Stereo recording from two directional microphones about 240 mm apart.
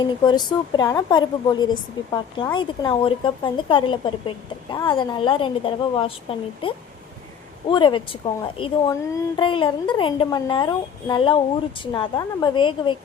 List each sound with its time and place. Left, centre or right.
0.0 s a woman's voice: centre